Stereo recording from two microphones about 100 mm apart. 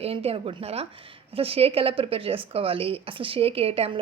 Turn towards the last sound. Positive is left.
turn(degrees=-75)  # may be behind; listen again after turning